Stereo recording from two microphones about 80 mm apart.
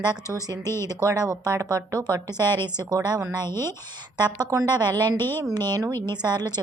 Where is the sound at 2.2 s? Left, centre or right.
Left.